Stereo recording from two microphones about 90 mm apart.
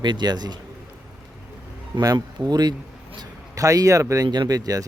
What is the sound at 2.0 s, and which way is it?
Speech, 45° right (ahead or behind).